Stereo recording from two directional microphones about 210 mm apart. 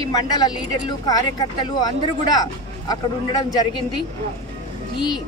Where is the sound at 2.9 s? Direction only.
20° left (ahead or behind).